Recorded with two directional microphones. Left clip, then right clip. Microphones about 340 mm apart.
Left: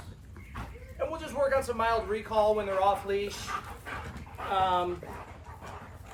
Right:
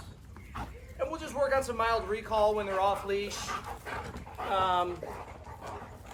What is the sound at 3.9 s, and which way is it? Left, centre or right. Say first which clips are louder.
Livestock: right 1 dB; right.